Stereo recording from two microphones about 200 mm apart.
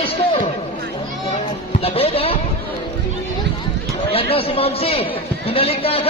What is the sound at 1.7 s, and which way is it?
Speech, 30° left (ahead or behind).